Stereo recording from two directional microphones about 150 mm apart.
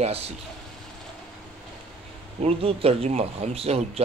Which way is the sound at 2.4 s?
40° right (ahead or behind).